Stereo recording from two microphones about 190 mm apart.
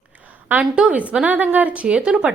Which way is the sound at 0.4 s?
5° right (ahead or behind).